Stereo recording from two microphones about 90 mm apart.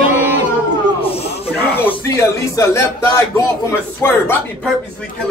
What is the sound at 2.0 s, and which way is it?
Speech, 30° left (ahead or behind).